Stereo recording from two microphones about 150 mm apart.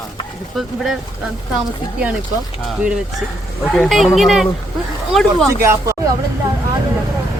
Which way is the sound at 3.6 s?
Centre (ahead or behind).